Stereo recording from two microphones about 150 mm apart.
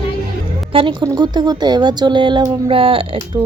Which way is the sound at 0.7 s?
35° right (ahead or behind).